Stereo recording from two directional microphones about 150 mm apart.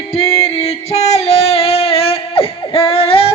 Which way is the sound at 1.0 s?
45° left (ahead or behind).